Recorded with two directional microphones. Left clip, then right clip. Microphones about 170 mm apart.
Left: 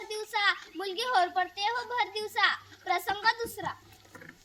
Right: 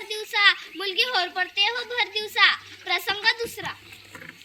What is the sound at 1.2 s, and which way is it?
Child singing, 10° left (ahead or behind).